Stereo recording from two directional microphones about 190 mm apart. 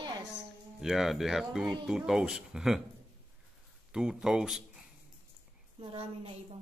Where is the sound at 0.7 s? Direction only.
Centre (ahead or behind).